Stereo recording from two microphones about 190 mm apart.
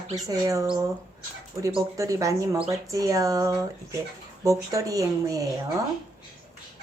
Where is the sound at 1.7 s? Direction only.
20° right (ahead or behind).